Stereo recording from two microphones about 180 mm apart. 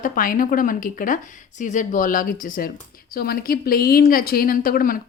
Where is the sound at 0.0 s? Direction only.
50° left (ahead or behind).